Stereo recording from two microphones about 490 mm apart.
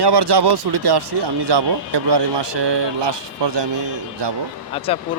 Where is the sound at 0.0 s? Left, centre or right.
Right.